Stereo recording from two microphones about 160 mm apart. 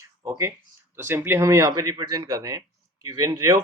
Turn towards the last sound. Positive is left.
turn(degrees=-20)  # may be behind; listen again after turning